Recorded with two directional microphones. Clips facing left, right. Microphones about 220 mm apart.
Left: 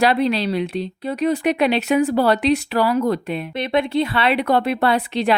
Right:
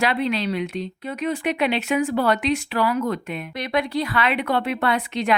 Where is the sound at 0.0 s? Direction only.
35° left (ahead or behind).